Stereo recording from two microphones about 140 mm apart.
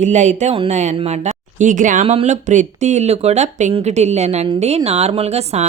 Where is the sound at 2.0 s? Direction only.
50° right (ahead or behind).